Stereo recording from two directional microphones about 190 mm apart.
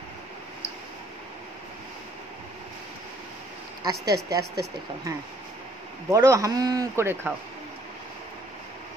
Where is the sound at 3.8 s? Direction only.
20° right (ahead or behind).